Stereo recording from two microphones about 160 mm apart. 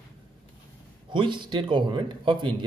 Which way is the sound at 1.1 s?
30° right (ahead or behind).